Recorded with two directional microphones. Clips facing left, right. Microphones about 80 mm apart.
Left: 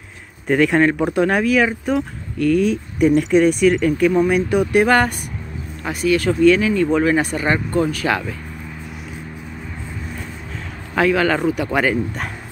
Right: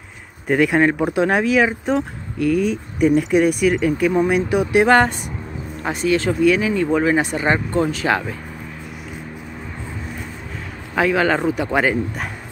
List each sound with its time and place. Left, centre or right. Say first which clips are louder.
0.5 s speech: left 1 dB; centre
2.6 s speech: left 1 dB; centre
3.2 s speech: left 2 dB; centre
11.0 s speech: left 1 dB; right